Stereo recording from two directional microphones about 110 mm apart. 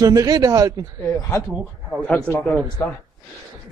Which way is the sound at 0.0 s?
35° right (ahead or behind).